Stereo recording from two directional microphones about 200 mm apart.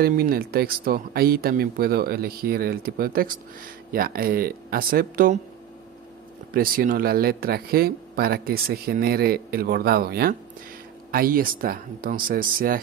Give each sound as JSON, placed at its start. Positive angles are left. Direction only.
{"t": 0.0, "sound": "speech", "side_deg": -50}
{"t": 6.5, "sound": "speech", "side_deg": -45}